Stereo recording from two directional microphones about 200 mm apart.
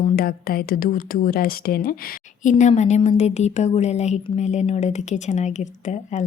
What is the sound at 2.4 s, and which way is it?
Speech, 40° left (ahead or behind).